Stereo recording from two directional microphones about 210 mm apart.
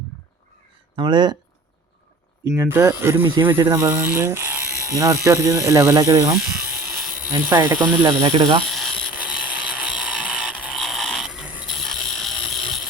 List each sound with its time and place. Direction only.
0.9 s speech: 20° right (ahead or behind)
2.4 s speech: 10° right (ahead or behind)
6.3 s electric shaver: 5° right (ahead or behind)
7.5 s speech: 10° right (ahead or behind)
8.2 s speech: 20° right (ahead or behind)
8.7 s a sound: centre (ahead or behind)